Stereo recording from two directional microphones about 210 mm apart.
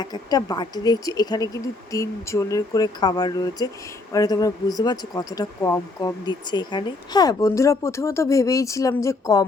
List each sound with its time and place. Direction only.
0.0 s speech: 20° left (ahead or behind)